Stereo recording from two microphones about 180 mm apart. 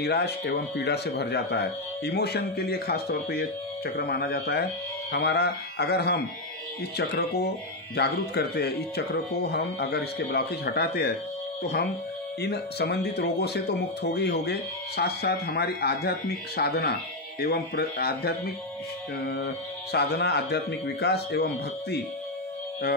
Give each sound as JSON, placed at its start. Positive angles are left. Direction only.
{"t": 0.0, "sound": "speech", "side_deg": 65}
{"t": 12.4, "sound": "speech", "side_deg": 65}